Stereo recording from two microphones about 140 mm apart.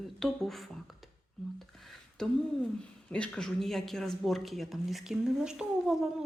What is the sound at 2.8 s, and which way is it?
Speech, 10° left (ahead or behind).